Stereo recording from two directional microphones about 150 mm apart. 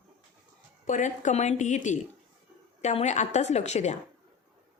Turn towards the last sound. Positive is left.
turn(degrees=50)  # may be behind; listen again after turning